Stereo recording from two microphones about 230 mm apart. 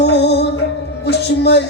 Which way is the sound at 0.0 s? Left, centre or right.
Left.